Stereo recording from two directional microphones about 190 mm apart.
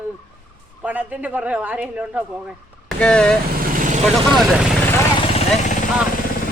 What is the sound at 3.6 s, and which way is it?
Vehicle, 45° right (ahead or behind).